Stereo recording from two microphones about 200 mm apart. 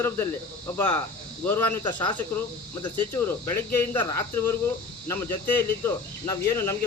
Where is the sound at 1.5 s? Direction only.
15° left (ahead or behind).